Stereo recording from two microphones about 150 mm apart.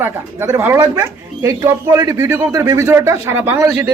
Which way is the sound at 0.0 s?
15° right (ahead or behind).